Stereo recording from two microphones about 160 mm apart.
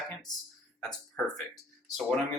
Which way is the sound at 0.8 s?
5° left (ahead or behind).